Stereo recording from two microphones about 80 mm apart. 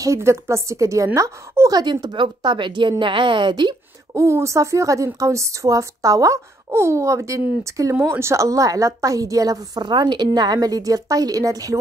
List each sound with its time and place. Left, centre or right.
0.0 s a woman's voice: right
1.7 s a woman's voice: right
4.1 s a woman's voice: right